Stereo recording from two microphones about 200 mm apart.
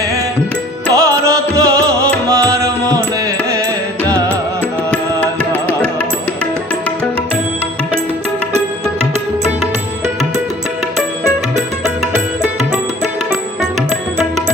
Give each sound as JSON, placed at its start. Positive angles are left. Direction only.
{"t": 0.9, "sound": "music", "side_deg": -15}
{"t": 5.2, "sound": "music", "side_deg": 10}